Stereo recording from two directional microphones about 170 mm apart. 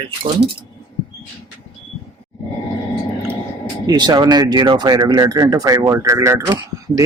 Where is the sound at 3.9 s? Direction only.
25° right (ahead or behind).